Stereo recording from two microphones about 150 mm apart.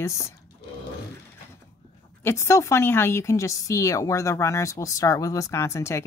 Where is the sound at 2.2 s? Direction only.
15° left (ahead or behind).